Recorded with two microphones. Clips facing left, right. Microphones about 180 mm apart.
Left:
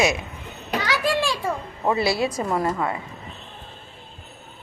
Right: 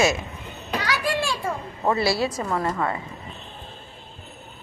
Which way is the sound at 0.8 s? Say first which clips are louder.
Left 3 dB; 15° left (ahead or behind).